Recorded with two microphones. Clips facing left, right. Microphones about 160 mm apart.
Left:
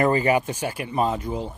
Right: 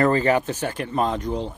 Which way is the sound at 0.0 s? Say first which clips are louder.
Right 1 dB; 10° left (ahead or behind).